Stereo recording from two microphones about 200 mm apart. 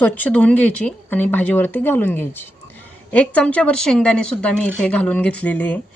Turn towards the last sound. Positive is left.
turn(degrees=5)  # may be behind; listen again after turning